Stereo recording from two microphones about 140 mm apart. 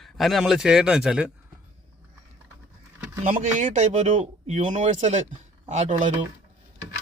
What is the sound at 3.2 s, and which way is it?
Speech, 70° right (ahead or behind).